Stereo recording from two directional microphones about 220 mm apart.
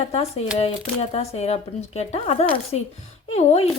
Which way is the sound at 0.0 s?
30° left (ahead or behind).